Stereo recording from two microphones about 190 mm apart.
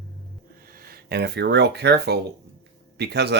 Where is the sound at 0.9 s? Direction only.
60° right (ahead or behind).